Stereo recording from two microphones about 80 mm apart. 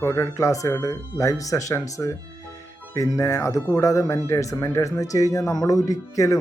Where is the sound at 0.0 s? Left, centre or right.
Left.